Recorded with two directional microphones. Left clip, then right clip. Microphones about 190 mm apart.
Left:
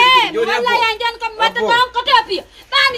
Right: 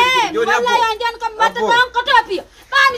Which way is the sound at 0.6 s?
15° right (ahead or behind).